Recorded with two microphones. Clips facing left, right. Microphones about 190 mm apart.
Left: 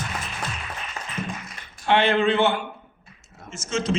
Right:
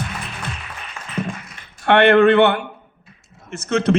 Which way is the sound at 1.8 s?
60° right (ahead or behind).